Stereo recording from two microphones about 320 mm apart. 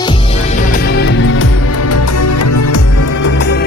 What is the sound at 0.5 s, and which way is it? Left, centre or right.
Music, left.